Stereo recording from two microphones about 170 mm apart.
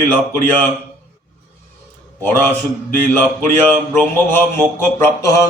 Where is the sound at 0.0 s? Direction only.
10° left (ahead or behind).